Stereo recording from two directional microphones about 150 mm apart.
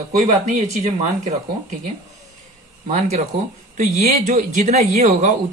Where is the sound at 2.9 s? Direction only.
50° right (ahead or behind).